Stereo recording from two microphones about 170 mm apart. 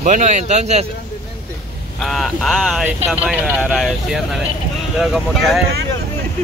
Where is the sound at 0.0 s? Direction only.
45° right (ahead or behind).